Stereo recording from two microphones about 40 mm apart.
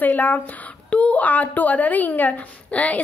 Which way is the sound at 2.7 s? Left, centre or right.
Left.